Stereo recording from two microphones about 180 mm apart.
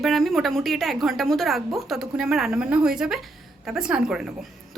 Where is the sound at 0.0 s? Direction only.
Centre (ahead or behind).